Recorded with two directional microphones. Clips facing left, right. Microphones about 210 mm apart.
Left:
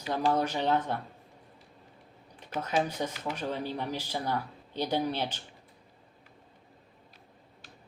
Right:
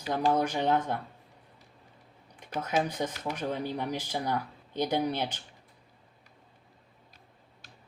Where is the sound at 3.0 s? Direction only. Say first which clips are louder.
Right 1 dB; 15° right (ahead or behind).